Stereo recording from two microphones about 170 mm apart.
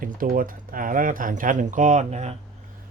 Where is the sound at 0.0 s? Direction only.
55° right (ahead or behind).